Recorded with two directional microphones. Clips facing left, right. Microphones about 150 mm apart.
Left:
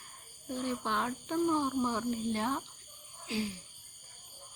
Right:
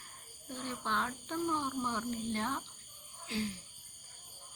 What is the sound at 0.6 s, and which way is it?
Speech, 10° left (ahead or behind).